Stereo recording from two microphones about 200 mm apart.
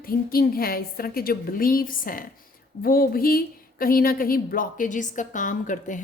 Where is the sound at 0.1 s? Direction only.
45° left (ahead or behind).